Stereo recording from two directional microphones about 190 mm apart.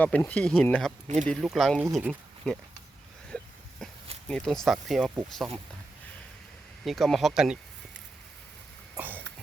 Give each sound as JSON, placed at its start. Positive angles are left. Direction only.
{"t": 0.0, "sound": "speech", "side_deg": 10}
{"t": 1.0, "sound": "speech", "side_deg": -40}
{"t": 1.3, "sound": "speech", "side_deg": 0}
{"t": 4.3, "sound": "speech", "side_deg": 5}
{"t": 6.8, "sound": "speech", "side_deg": 0}
{"t": 9.0, "sound": "a sound", "side_deg": -10}